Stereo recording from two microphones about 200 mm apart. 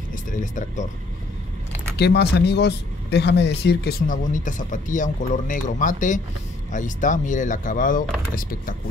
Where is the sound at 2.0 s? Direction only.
55° left (ahead or behind).